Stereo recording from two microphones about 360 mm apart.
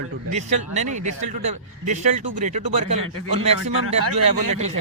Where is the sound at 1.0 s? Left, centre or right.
Centre.